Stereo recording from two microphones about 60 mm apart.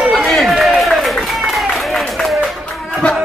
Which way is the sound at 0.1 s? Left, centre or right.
Centre.